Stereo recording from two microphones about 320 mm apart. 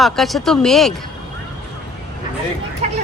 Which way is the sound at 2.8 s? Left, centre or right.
Right.